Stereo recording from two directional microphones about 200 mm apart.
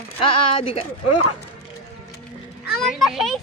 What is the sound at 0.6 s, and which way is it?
Speech, 30° left (ahead or behind).